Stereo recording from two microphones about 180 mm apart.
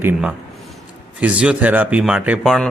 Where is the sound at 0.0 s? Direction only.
10° right (ahead or behind).